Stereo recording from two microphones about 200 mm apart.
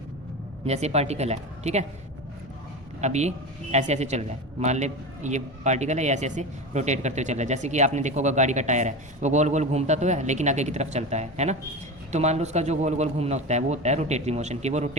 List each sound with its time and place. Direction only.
0.6 s a man's voice: 30° right (ahead or behind)
3.0 s a man's voice: 35° right (ahead or behind)